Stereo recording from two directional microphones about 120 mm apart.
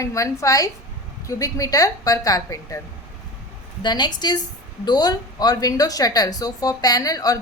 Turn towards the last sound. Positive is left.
turn(degrees=30)  # may be behind; listen again after turning